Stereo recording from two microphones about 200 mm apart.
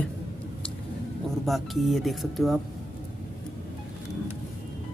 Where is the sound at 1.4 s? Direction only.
Centre (ahead or behind).